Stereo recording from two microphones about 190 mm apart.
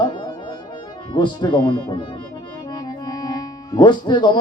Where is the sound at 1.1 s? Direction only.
25° left (ahead or behind).